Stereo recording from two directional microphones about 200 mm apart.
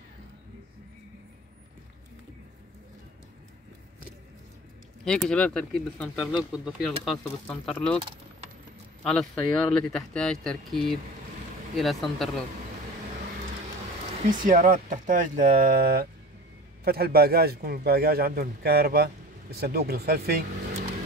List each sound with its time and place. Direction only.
5.0 s speech: 5° left (ahead or behind)
9.0 s speech: 5° left (ahead or behind)
14.2 s a man's voice: 40° right (ahead or behind)